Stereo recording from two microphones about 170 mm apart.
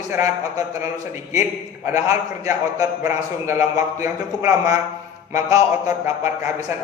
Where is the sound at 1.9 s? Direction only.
15° right (ahead or behind).